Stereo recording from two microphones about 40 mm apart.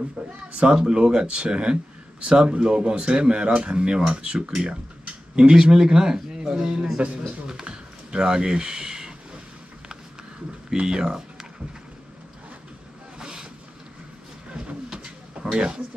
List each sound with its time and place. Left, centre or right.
0.5 s speech: right
0.7 s speech: centre
7.0 s speech: right
7.6 s a sound: right
10.9 s speech: centre
13.2 s vehicle: centre
14.9 s pigeon: right